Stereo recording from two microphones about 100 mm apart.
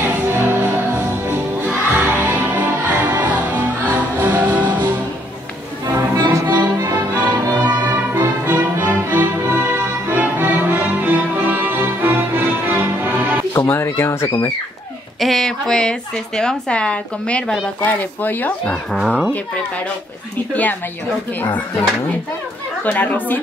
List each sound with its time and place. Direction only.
0.0 s music: 20° right (ahead or behind)
5.9 s music: 30° right (ahead or behind)
7.6 s music: 20° right (ahead or behind)
13.5 s a sound: 25° left (ahead or behind)
15.1 s speech: centre (ahead or behind); by 18.8 s 15° left (ahead or behind)
18.9 s a child's voice: 5° right (ahead or behind)
22.8 s speech: 15° left (ahead or behind)